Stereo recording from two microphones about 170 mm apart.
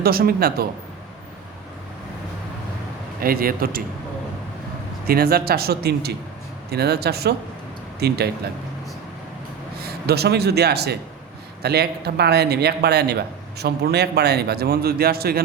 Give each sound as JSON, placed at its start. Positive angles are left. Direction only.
{"t": 0.0, "sound": "speech", "side_deg": -65}
{"t": 3.2, "sound": "speech", "side_deg": -60}
{"t": 5.0, "sound": "a man's voice", "side_deg": -60}
{"t": 9.8, "sound": "a man's voice", "side_deg": -70}